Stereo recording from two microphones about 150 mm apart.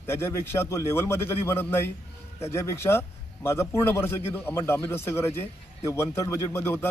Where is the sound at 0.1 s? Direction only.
15° left (ahead or behind).